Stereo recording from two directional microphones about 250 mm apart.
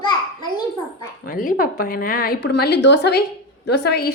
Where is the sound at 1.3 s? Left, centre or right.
Left.